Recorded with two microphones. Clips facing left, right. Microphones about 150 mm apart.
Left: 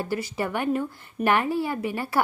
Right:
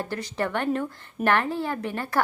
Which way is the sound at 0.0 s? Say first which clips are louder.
Left 1 dB; 5° left (ahead or behind).